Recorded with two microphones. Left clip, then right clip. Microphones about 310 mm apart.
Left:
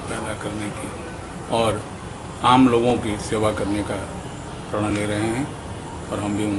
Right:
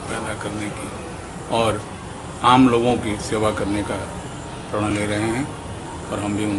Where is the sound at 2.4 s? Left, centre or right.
Centre.